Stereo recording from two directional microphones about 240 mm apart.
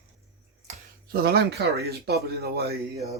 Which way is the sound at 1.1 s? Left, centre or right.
Right.